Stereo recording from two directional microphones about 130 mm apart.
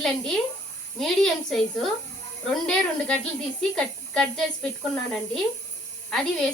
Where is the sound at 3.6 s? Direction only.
5° left (ahead or behind).